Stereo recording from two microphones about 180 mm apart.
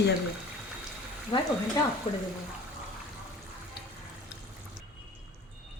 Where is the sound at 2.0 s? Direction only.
25° left (ahead or behind).